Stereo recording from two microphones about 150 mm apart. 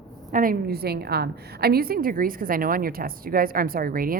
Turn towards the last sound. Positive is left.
turn(degrees=-75)  # may be behind; listen again after turning